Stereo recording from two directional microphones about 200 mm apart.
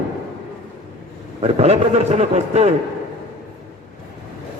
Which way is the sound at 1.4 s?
35° right (ahead or behind).